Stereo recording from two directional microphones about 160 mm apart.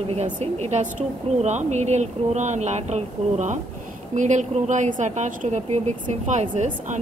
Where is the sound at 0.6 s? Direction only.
45° right (ahead or behind).